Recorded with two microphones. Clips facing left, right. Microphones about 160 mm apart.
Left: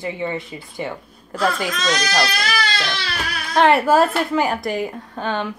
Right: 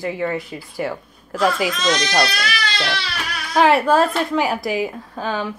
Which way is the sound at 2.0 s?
15° right (ahead or behind).